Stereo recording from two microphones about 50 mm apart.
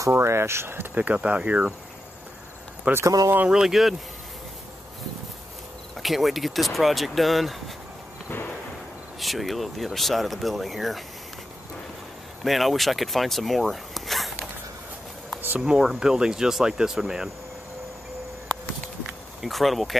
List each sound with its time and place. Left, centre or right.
0.1 s speech: right
0.9 s speech: right
2.9 s speech: right
3.6 s speech: centre
6.0 s speech: centre
9.2 s speech: centre
12.4 s speech: centre
15.2 s a sound: right
15.8 s speech: centre
19.4 s speech: centre